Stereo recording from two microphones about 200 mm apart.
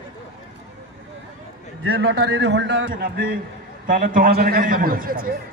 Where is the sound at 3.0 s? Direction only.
45° right (ahead or behind).